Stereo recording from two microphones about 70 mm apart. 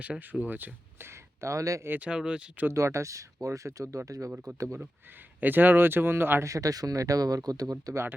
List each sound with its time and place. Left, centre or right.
0.0 s speech: right
2.0 s speech: centre
2.7 s speech: right
5.4 s speech: right
6.4 s speech: right